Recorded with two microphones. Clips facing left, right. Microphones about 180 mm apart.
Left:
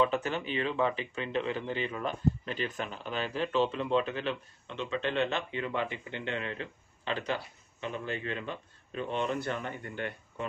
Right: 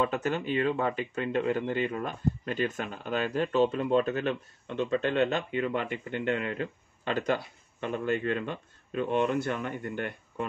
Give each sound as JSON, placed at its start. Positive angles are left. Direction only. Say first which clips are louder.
{"t": 0.0, "sound": "speech", "louder": "right 1 dB", "side_deg": -45}